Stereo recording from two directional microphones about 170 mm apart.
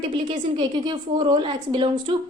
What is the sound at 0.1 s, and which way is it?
A woman's voice, 30° right (ahead or behind).